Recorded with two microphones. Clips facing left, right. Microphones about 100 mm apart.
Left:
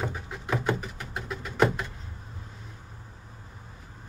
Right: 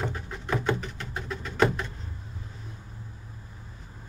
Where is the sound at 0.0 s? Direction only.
5° left (ahead or behind).